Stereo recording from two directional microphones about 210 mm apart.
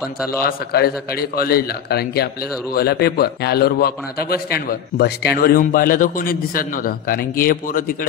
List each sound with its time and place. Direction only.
0.4 s a man's voice: 45° left (ahead or behind)